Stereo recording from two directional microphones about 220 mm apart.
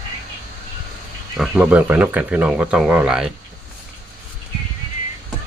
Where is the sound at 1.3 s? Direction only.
5° right (ahead or behind).